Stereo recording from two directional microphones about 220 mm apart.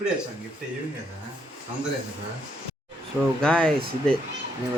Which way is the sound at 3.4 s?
5° left (ahead or behind).